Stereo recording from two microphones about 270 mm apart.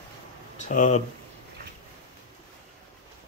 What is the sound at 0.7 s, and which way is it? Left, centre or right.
Speech, left.